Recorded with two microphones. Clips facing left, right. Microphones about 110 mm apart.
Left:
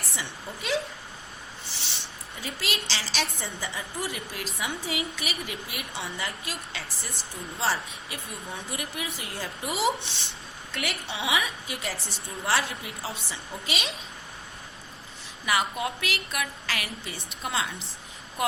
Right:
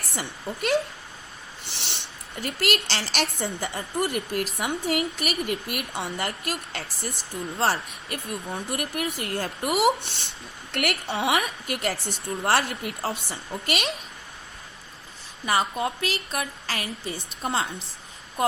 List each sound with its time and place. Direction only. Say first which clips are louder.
0.2 s a woman's voice: right 7 dB; 55° right (ahead or behind)
1.7 s a woman's voice: right 4 dB; 70° right (ahead or behind)
15.4 s a woman's voice: right 3 dB; 35° right (ahead or behind)